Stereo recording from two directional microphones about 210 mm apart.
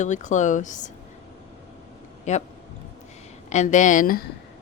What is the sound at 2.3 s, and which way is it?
Speech, 35° left (ahead or behind).